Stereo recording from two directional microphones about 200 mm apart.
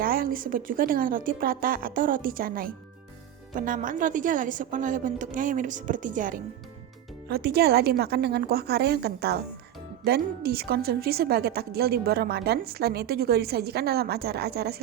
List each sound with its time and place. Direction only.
0.0 s a woman's voice: 45° right (ahead or behind)